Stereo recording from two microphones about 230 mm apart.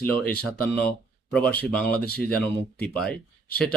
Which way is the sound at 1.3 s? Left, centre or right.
Centre.